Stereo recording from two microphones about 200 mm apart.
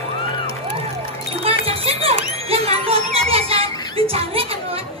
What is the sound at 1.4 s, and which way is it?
A child's voice, 30° right (ahead or behind).